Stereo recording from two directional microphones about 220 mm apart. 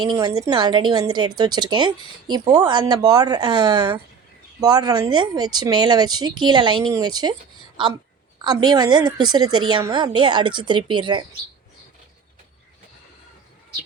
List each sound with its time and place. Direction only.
0.1 s a woman's voice: 15° right (ahead or behind)